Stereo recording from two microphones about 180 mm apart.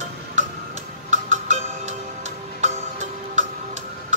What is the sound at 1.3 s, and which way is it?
Music, 40° right (ahead or behind).